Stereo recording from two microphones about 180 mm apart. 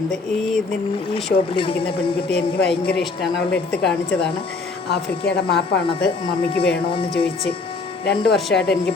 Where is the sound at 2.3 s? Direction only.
65° left (ahead or behind).